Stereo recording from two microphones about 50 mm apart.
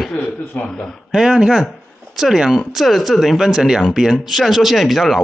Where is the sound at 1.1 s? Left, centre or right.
Centre.